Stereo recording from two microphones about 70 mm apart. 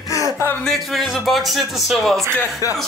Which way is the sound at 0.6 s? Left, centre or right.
Centre.